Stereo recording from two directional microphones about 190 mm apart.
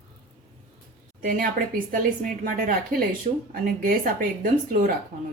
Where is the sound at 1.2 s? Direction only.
45° right (ahead or behind).